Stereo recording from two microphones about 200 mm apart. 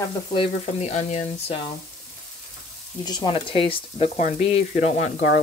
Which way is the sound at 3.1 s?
20° left (ahead or behind).